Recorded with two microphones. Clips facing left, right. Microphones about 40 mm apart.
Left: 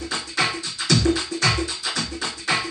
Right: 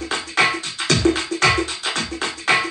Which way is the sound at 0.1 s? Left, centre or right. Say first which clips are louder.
Right 6 dB; right.